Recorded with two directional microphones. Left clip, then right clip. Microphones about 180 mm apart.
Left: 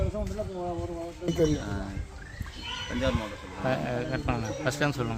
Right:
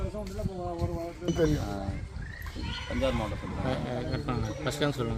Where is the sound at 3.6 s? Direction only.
25° left (ahead or behind).